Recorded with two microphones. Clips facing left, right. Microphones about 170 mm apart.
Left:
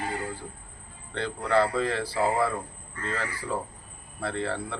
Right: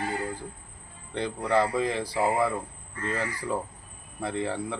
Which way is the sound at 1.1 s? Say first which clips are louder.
Even; 15° right (ahead or behind).